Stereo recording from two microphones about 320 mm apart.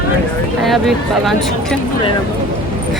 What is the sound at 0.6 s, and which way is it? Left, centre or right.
Speech, centre.